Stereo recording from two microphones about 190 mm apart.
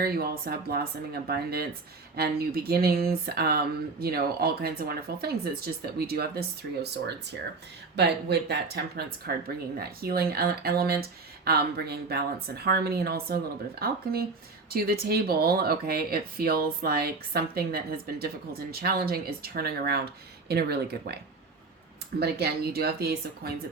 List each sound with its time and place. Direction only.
0.0 s speech: 55° right (ahead or behind)
7.9 s speech: 60° right (ahead or behind)
22.2 s speech: 55° right (ahead or behind)